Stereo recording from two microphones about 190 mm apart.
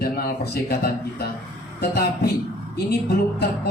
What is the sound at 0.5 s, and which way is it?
Speech, 55° left (ahead or behind).